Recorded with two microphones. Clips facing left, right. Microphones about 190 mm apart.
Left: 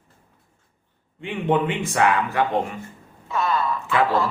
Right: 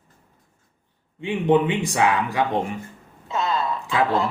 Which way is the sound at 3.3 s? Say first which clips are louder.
Left 1 dB; 25° right (ahead or behind).